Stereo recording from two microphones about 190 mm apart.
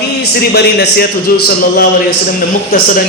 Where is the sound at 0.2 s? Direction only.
60° left (ahead or behind).